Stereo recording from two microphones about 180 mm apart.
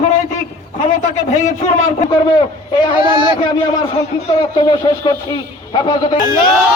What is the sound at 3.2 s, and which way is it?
A man's voice, 25° left (ahead or behind).